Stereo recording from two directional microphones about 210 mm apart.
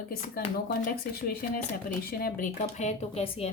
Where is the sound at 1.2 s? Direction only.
45° left (ahead or behind); by 3.5 s 30° left (ahead or behind).